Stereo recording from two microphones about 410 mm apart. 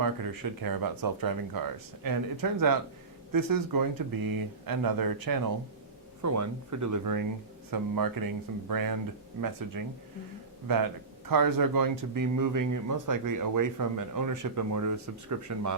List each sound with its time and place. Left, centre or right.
0.0 s speech: right
6.2 s speech: right